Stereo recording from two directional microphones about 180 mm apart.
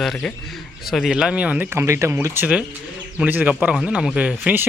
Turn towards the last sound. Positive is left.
turn(degrees=-10)  # may be behind; listen again after turning